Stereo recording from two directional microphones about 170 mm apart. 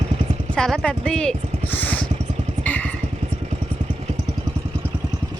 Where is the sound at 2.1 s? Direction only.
40° right (ahead or behind).